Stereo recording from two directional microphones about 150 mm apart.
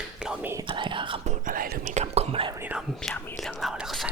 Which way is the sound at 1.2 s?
55° right (ahead or behind).